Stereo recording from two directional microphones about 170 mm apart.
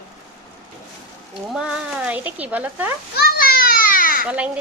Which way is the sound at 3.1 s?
65° left (ahead or behind).